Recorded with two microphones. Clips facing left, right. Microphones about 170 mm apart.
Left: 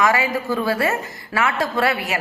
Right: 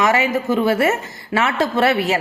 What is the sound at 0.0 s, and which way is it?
A woman's voice, 25° right (ahead or behind).